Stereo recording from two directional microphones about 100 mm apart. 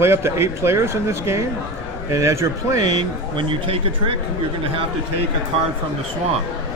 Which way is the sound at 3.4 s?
60° right (ahead or behind).